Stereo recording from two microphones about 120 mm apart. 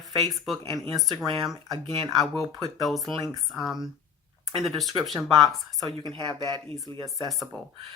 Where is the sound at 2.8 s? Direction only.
Centre (ahead or behind).